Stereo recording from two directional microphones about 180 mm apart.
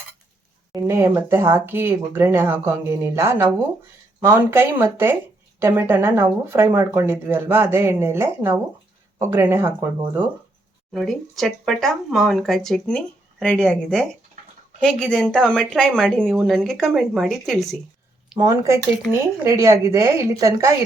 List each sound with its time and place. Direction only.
0.7 s speech: 15° right (ahead or behind)
10.9 s speech: centre (ahead or behind)
18.3 s speech: 15° right (ahead or behind)